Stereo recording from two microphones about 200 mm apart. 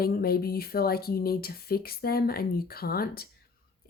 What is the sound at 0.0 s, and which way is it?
Speech, 50° left (ahead or behind).